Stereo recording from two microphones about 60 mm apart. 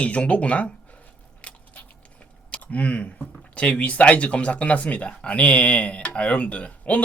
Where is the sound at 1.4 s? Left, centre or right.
Left.